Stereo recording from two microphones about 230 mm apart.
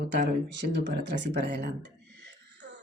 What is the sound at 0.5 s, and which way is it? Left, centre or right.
A woman's voice, right.